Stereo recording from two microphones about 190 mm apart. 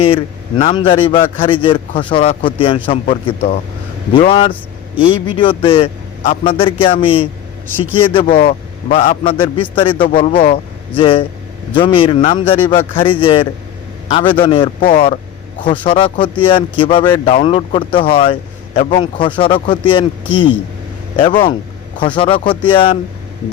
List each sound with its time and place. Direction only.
0.0 s a man's voice: 30° left (ahead or behind)
8.2 s speech: 50° left (ahead or behind)
8.4 s a man's voice: 35° left (ahead or behind)